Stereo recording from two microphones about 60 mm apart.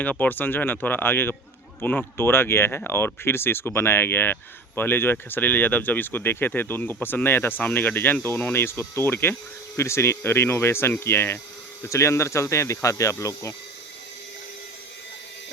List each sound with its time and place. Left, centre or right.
0.0 s speech: left
8.6 s speech: left
11.9 s speech: left